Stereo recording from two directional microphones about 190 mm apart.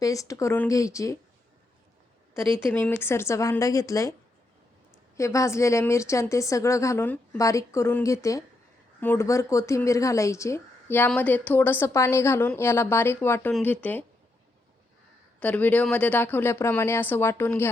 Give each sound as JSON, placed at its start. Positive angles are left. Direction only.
{"t": 0.0, "sound": "speech", "side_deg": 15}
{"t": 2.7, "sound": "speech", "side_deg": 10}
{"t": 5.1, "sound": "speech", "side_deg": 15}
{"t": 15.4, "sound": "speech", "side_deg": 10}